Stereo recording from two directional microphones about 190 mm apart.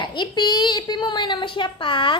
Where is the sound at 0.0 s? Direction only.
25° left (ahead or behind).